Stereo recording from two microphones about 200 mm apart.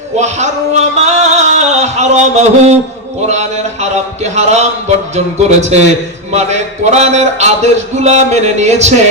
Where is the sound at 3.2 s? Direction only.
35° right (ahead or behind).